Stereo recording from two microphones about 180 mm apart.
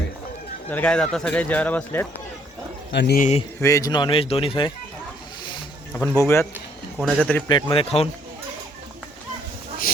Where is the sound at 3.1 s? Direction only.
45° left (ahead or behind).